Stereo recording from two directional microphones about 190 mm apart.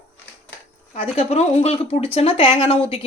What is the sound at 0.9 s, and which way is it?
Speech, 30° left (ahead or behind).